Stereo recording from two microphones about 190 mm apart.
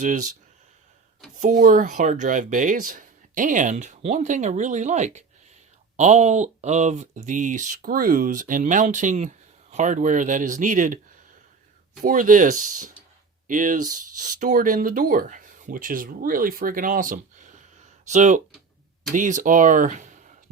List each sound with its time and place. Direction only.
0.0 s speech: 40° right (ahead or behind)
1.4 s speech: 40° right (ahead or behind)
12.0 s speech: 45° right (ahead or behind)